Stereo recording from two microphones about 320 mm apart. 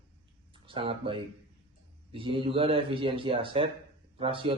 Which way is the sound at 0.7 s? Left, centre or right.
Centre.